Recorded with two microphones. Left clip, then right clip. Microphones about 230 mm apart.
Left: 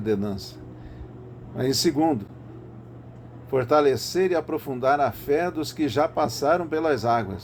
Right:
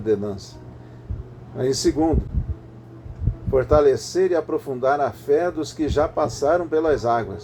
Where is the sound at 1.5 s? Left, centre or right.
Left.